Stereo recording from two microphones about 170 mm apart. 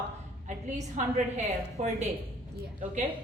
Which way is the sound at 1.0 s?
45° right (ahead or behind).